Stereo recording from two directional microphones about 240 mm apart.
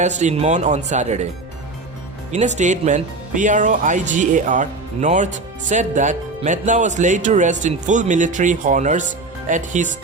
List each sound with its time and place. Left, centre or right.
0.0 s speech: right
2.3 s speech: right